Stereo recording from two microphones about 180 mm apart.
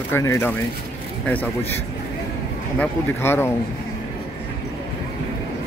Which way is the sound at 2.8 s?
15° left (ahead or behind).